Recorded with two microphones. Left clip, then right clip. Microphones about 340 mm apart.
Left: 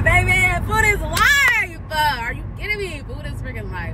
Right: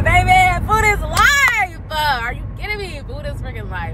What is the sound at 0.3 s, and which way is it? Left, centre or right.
Vehicle, centre.